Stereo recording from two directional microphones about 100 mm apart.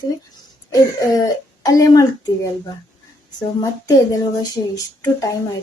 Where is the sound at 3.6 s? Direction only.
40° left (ahead or behind).